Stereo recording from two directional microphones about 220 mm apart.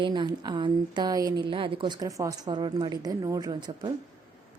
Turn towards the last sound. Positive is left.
turn(degrees=-20)  # may be behind; listen again after turning